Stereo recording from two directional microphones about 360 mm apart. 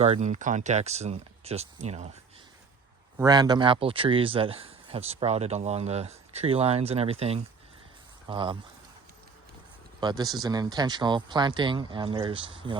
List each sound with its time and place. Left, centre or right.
0.0 s speech: centre
3.2 s speech: centre
10.0 s speech: centre